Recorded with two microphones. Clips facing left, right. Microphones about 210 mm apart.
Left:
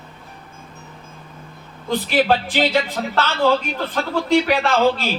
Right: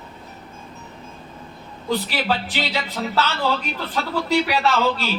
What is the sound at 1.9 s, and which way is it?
Speech, 50° left (ahead or behind).